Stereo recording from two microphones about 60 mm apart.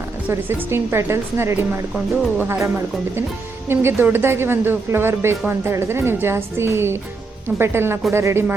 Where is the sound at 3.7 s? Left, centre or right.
Right.